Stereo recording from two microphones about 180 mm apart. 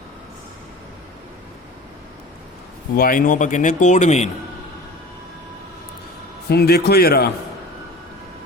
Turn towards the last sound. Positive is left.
turn(degrees=60)  # may be behind; listen again after turning